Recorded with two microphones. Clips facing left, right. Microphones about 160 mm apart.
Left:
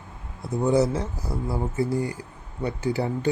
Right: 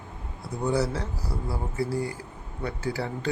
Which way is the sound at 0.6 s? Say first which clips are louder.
Left 5 dB; 20° left (ahead or behind).